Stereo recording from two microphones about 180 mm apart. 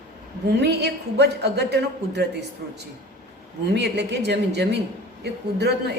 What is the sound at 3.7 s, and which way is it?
A woman's voice, 70° right (ahead or behind).